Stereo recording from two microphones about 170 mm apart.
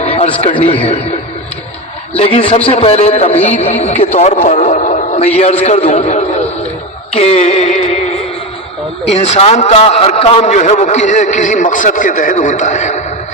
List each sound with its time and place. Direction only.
0.0 s a man's voice: 35° left (ahead or behind)
2.1 s a man's voice: 35° left (ahead or behind)
4.4 s radio: 45° left (ahead or behind)
5.4 s a man's voice: 40° left (ahead or behind)
7.2 s music: 40° left (ahead or behind)
9.0 s a man's voice: 40° left (ahead or behind)